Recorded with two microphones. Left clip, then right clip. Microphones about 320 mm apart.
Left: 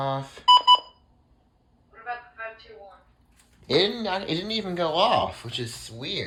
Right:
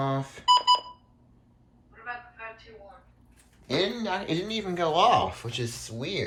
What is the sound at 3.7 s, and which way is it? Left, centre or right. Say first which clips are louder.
Speech: left 4 dB; centre.